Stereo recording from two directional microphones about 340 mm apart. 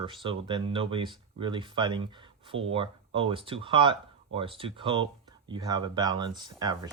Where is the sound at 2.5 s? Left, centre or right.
Right.